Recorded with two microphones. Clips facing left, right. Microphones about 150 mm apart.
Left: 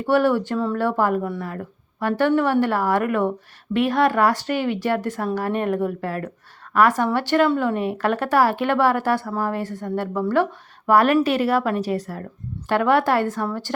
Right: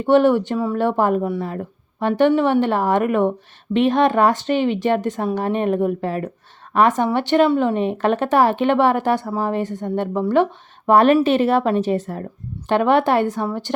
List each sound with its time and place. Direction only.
0.0 s speech: 20° right (ahead or behind)